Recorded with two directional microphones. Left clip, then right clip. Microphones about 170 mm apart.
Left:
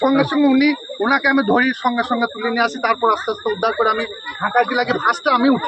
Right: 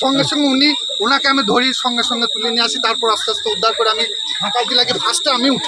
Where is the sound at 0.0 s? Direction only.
5° right (ahead or behind).